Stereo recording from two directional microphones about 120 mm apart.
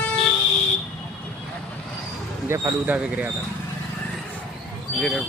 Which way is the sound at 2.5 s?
20° right (ahead or behind).